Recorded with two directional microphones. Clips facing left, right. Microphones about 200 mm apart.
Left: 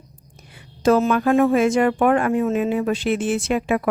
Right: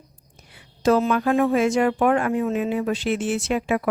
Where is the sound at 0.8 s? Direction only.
50° left (ahead or behind).